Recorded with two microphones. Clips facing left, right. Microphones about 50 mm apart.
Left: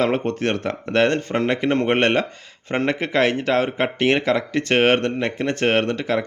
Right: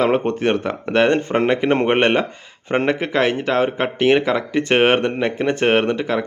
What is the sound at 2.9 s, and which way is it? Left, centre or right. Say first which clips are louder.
Speech: right 1 dB; centre.